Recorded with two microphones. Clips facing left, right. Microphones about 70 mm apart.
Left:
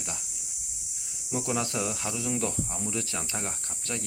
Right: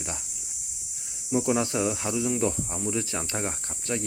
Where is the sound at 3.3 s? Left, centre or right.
Right.